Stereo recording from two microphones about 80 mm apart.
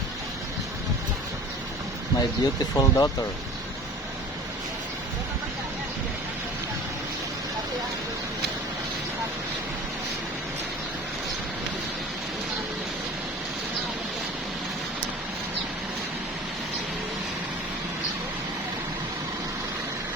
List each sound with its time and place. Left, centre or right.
2.1 s speech: left